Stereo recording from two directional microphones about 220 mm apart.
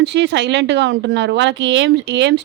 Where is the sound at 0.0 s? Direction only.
50° right (ahead or behind).